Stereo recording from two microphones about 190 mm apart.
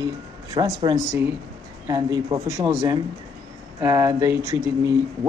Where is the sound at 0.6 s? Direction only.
20° right (ahead or behind).